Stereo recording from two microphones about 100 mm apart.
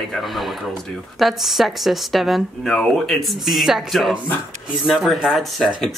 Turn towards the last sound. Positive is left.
turn(degrees=0)  # may be behind; listen again after turning